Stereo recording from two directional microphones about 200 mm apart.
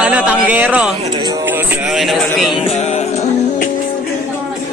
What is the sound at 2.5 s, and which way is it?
Music, 30° left (ahead or behind).